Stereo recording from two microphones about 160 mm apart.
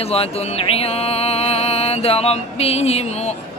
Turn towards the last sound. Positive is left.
turn(degrees=40)  # may be behind; listen again after turning